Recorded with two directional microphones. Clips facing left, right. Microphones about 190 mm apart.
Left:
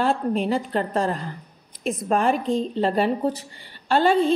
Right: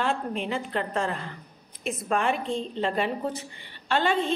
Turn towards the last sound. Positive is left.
turn(degrees=40)  # may be behind; listen again after turning